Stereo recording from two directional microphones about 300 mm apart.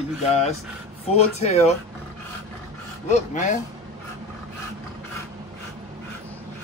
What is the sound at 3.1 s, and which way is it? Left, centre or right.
Speech, left.